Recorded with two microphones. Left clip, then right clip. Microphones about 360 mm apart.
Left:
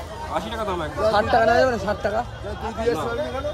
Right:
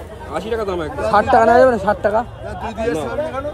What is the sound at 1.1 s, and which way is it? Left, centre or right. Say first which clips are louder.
Speech: right 7 dB; right.